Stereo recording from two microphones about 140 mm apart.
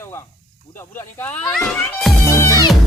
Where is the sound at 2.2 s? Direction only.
20° left (ahead or behind).